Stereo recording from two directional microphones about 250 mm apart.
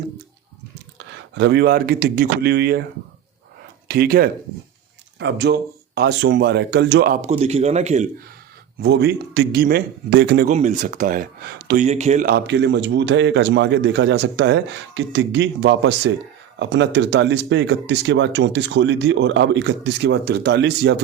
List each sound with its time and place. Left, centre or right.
0.9 s speech: right
3.8 s speech: right
8.8 s speech: right
12.3 s speech: right